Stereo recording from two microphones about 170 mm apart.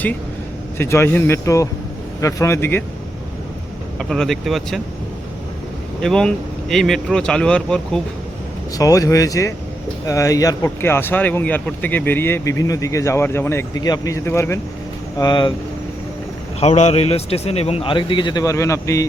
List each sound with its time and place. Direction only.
0.8 s speech: 15° left (ahead or behind)
3.9 s speech: centre (ahead or behind)
6.0 s speech: 5° left (ahead or behind)
8.8 s speech: 20° left (ahead or behind)
15.2 s speech: 25° left (ahead or behind)
16.6 s a man's voice: 40° left (ahead or behind); by 19.0 s 15° left (ahead or behind)